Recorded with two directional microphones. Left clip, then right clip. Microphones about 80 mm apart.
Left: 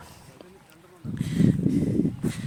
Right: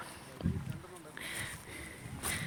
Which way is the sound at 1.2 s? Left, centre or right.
Left.